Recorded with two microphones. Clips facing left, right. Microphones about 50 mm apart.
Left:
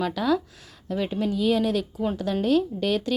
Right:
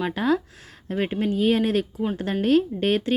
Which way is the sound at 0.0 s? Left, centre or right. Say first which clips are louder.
Right 1 dB; right.